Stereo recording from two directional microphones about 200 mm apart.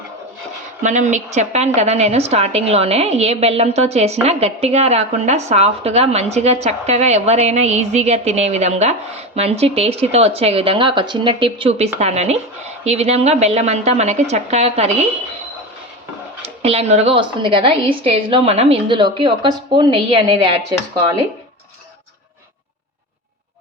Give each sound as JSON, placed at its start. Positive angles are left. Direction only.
{"t": 0.8, "sound": "a woman's voice", "side_deg": -35}
{"t": 16.4, "sound": "a woman's voice", "side_deg": -30}